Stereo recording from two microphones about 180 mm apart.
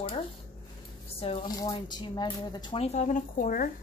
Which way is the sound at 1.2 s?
30° left (ahead or behind).